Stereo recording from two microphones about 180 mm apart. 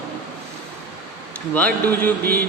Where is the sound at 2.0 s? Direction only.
10° left (ahead or behind).